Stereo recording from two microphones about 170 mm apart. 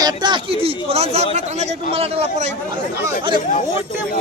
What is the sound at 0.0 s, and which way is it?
A man's voice, 25° right (ahead or behind).